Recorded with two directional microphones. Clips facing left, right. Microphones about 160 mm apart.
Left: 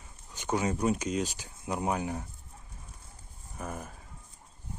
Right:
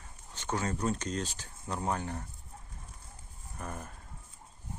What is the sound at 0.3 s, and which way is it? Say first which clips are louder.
Speech: left 4 dB; 10° left (ahead or behind).